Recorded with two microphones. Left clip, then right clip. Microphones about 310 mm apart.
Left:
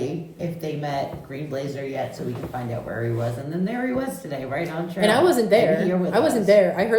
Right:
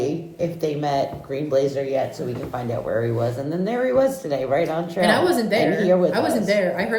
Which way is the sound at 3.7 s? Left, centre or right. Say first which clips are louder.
Right 9 dB; centre.